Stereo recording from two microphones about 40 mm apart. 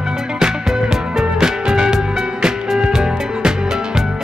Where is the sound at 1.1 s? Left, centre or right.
Centre.